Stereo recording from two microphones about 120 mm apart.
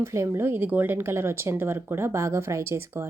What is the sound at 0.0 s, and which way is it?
Speech, 20° right (ahead or behind).